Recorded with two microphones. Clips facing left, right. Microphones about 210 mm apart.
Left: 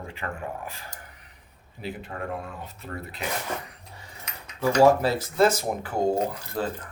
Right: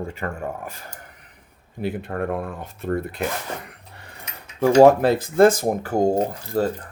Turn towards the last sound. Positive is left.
turn(degrees=-35)  # may be behind; listen again after turning